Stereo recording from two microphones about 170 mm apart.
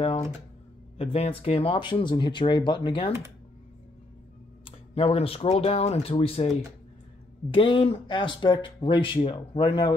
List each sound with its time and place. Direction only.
0.9 s speech: 35° left (ahead or behind)
4.6 s speech: 35° left (ahead or behind)
7.5 s speech: 30° left (ahead or behind)